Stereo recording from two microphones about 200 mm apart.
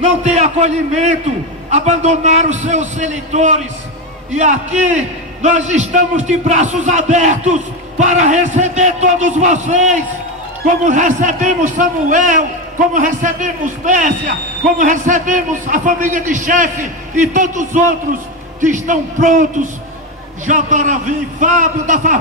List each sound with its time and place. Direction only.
0.0 s a man's voice: 35° right (ahead or behind)